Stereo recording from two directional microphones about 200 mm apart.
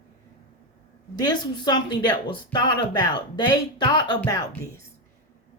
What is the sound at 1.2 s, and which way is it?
A woman's voice, 20° left (ahead or behind).